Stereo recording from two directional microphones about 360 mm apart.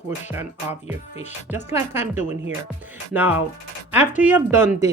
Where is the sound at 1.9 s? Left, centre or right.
Centre.